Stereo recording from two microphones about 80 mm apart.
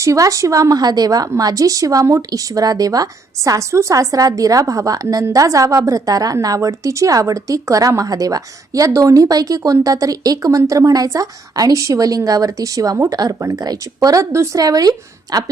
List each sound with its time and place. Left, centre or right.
0.0 s a woman's voice: right